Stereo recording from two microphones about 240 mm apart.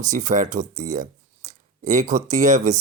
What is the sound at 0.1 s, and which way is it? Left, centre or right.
Speech, right.